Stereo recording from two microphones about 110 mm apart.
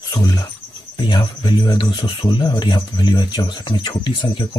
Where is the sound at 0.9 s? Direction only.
45° left (ahead or behind).